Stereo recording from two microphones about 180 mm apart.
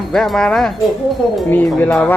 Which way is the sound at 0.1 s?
Centre (ahead or behind).